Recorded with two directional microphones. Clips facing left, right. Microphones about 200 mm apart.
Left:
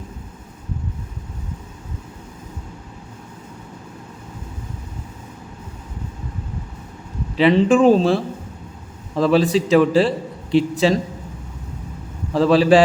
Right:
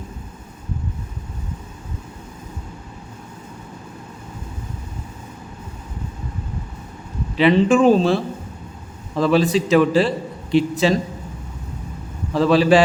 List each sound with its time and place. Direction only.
7.3 s a man's voice: 35° left (ahead or behind)
12.3 s a man's voice: 35° left (ahead or behind)